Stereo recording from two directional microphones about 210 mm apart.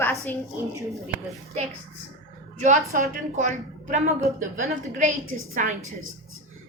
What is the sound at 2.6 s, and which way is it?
A woman's voice, 35° right (ahead or behind).